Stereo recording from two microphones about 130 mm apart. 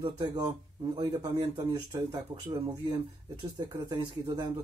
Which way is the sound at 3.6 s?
35° right (ahead or behind).